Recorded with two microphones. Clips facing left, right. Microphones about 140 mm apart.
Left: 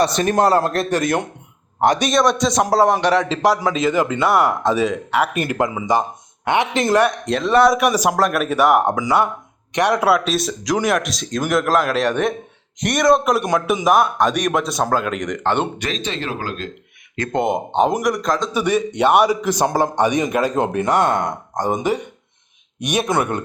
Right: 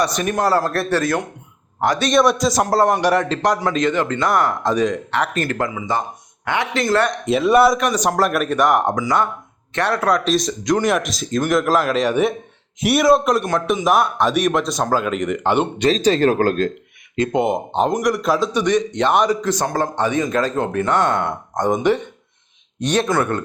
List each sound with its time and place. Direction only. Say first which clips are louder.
0.0 s speech: left 3 dB; 30° left (ahead or behind)
2.0 s a man's voice: right 1 dB; centre (ahead or behind); by 7.1 s 15° left (ahead or behind)
7.1 s a man's voice: right 2 dB; 5° right (ahead or behind)
7.8 s a man's voice: left 1 dB; 10° left (ahead or behind)
13.4 s a man's voice: left 1 dB; 10° left (ahead or behind)
13.8 s a man's voice: left 2 dB; centre (ahead or behind)
15.8 s speech: right 10 dB; 35° right (ahead or behind)
17.3 s a man's voice: left 2 dB; 5° right (ahead or behind)
18.5 s a man's voice: right 1 dB; 5° left (ahead or behind)